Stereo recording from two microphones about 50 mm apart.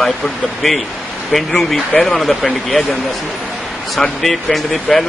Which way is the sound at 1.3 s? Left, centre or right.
Centre.